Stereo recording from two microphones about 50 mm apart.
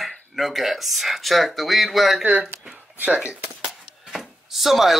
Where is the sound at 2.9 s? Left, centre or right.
Right.